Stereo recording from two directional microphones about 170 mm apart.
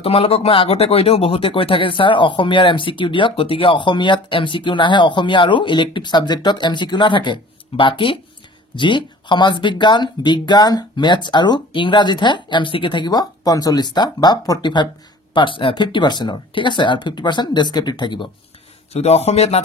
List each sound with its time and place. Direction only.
0.0 s speech: 35° left (ahead or behind)
18.9 s speech: 40° left (ahead or behind)